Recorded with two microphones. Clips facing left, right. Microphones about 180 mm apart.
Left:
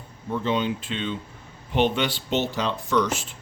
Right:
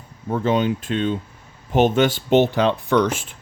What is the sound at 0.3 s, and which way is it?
Speech, 50° right (ahead or behind).